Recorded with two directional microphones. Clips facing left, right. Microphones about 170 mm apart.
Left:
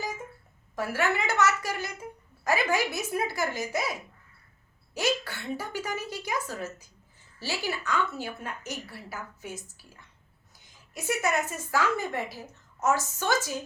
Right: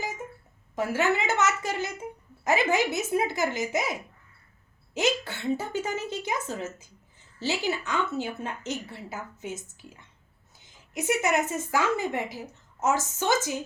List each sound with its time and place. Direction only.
0.8 s a woman's voice: 20° right (ahead or behind)
4.9 s a woman's voice: 20° right (ahead or behind)